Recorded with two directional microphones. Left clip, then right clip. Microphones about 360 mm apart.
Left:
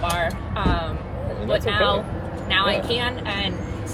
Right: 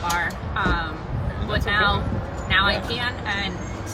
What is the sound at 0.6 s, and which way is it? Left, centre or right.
Speech, right.